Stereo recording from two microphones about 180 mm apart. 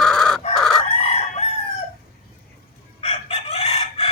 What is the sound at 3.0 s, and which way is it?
Chicken, 35° left (ahead or behind).